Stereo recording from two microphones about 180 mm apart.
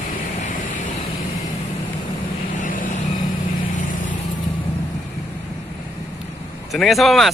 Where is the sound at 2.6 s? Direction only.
50° left (ahead or behind).